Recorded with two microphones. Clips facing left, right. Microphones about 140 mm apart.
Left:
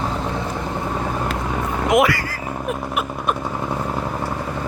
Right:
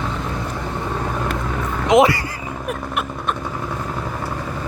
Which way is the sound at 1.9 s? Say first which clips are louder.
Right 3 dB; 25° right (ahead or behind).